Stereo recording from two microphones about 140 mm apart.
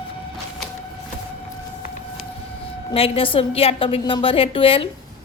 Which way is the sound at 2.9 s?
40° left (ahead or behind).